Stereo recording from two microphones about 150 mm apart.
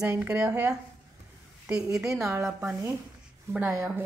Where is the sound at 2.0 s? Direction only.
20° right (ahead or behind).